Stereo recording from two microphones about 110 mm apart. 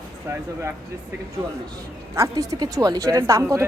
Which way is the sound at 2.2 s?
35° right (ahead or behind).